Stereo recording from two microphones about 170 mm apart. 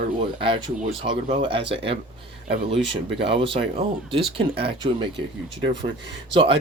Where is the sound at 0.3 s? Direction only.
30° right (ahead or behind).